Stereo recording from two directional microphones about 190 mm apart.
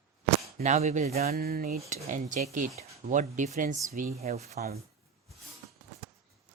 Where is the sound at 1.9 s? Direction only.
40° right (ahead or behind).